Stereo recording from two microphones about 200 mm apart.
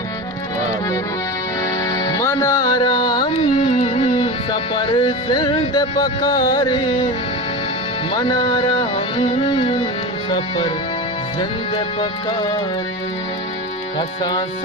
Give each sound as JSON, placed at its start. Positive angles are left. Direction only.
{"t": 2.0, "sound": "music", "side_deg": 15}
{"t": 8.1, "sound": "music", "side_deg": 20}
{"t": 11.9, "sound": "music", "side_deg": 20}